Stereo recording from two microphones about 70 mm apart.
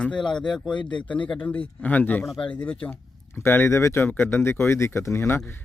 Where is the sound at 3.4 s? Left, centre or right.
Left.